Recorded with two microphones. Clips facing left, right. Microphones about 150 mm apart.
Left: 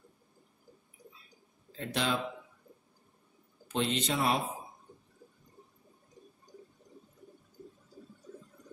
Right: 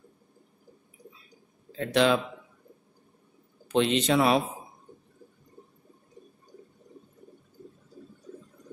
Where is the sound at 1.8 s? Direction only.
85° right.